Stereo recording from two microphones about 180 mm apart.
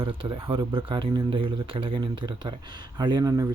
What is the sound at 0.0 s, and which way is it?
Speech, 30° right (ahead or behind).